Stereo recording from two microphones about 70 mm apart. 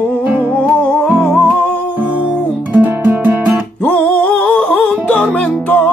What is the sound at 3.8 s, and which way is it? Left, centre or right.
Music, left.